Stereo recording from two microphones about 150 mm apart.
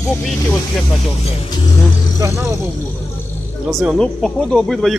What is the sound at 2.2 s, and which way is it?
Speech, 20° right (ahead or behind).